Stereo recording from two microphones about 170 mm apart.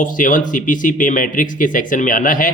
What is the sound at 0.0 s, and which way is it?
Speech, 50° left (ahead or behind).